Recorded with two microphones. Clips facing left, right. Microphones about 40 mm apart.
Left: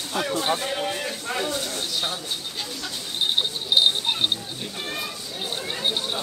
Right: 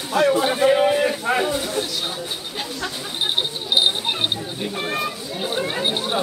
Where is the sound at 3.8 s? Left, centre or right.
Centre.